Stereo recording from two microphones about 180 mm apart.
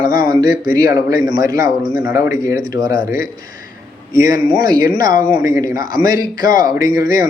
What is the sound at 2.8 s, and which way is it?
Speech, 55° left (ahead or behind).